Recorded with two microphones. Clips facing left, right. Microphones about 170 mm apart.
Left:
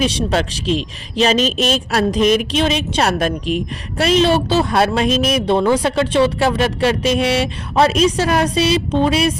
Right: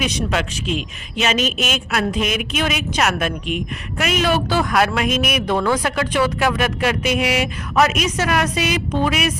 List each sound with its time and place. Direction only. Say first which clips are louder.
0.0 s a woman's voice: left 4 dB; 30° left (ahead or behind)